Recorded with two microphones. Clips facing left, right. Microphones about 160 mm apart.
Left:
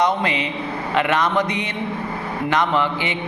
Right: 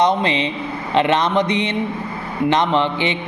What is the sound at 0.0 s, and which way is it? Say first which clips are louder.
Speech: right 3 dB; 25° right (ahead or behind).